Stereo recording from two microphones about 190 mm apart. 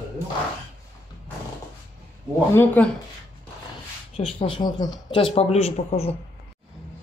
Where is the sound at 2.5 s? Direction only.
10° left (ahead or behind).